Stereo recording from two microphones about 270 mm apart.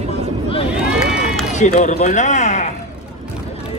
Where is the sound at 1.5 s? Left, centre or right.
Left.